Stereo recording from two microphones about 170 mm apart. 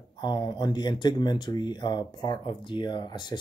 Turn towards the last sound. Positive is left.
turn(degrees=25)  # may be behind; listen again after turning